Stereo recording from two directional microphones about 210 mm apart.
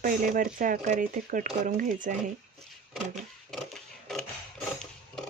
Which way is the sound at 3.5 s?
Centre (ahead or behind).